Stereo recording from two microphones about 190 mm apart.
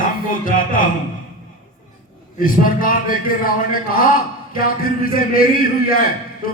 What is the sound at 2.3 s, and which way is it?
A man's voice, 45° left (ahead or behind).